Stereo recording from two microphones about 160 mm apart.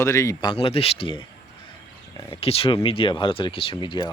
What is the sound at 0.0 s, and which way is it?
Speech, 20° left (ahead or behind).